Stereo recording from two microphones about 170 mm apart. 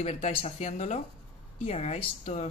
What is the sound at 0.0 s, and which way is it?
Speech, 35° left (ahead or behind).